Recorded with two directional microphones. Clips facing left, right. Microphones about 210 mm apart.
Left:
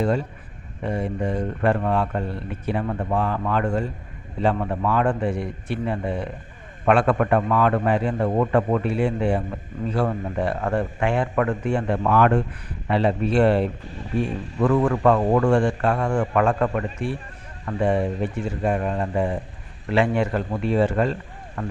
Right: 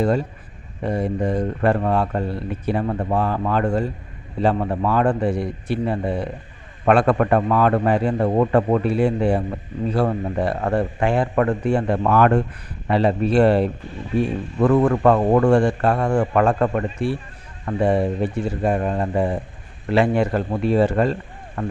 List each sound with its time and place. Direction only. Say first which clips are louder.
0.9 s a man's voice: right 3 dB; 40° right (ahead or behind)